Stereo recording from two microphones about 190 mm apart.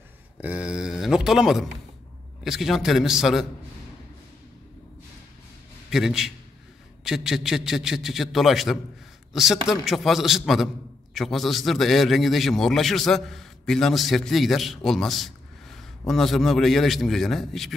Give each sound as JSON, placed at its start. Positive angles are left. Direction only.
{"t": 0.4, "sound": "a man's voice", "side_deg": -5}
{"t": 5.9, "sound": "a man's voice", "side_deg": 0}